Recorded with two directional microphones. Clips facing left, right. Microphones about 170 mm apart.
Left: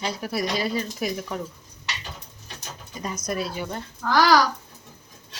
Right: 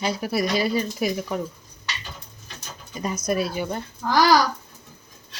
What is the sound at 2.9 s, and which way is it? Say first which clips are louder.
Speech: right 4 dB; 10° right (ahead or behind).